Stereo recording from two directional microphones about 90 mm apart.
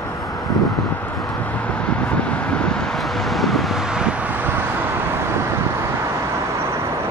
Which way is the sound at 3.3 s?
Centre (ahead or behind).